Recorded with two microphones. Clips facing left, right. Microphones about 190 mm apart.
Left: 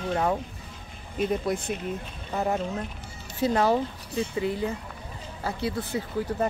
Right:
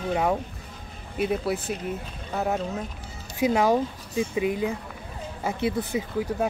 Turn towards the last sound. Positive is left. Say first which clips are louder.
# right 1 dB
turn(degrees=-10)  # may be behind; listen again after turning